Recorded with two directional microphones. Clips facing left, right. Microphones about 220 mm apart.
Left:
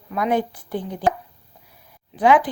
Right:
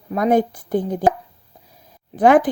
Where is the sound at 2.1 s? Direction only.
45° right (ahead or behind).